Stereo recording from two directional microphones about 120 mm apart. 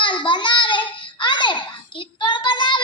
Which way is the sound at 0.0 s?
40° left (ahead or behind).